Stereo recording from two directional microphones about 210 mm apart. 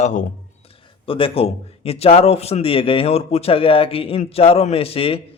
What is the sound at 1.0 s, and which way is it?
A man's voice, 25° left (ahead or behind).